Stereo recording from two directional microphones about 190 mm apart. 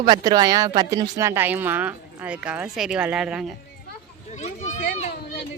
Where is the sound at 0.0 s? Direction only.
20° right (ahead or behind); by 3.5 s 5° right (ahead or behind).